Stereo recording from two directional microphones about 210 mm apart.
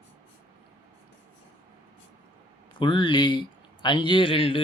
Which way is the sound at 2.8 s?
25° left (ahead or behind).